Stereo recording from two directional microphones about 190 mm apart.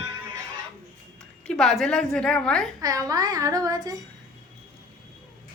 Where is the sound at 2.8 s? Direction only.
20° right (ahead or behind).